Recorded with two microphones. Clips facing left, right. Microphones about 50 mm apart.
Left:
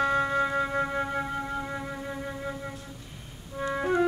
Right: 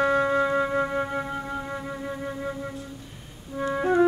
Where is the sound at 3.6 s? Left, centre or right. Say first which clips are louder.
Right 4 dB; centre.